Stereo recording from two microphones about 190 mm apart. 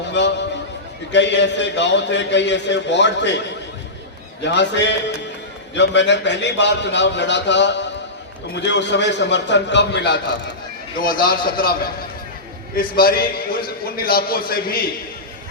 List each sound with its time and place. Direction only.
0.1 s horse: 70° left (ahead or behind)
1.1 s a man's voice: 65° left (ahead or behind)
4.4 s a man's voice: 65° left (ahead or behind)
11.0 s a man's voice: 50° left (ahead or behind)